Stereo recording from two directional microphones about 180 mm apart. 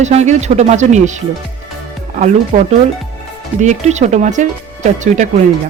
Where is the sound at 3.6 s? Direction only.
40° right (ahead or behind).